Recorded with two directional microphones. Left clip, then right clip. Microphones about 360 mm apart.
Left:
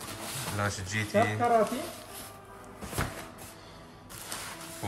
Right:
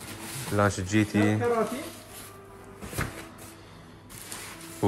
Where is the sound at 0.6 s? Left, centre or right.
Centre.